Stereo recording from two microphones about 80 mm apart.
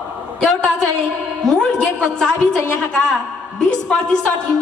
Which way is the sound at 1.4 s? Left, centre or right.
Centre.